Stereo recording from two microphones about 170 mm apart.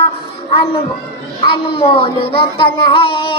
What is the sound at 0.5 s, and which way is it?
Child singing, 30° left (ahead or behind).